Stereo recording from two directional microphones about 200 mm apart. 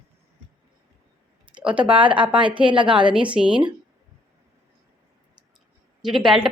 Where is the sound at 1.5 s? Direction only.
5° right (ahead or behind).